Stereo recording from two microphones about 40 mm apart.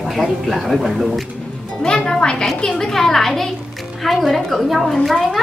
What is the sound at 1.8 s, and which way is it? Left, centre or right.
A woman's voice, centre.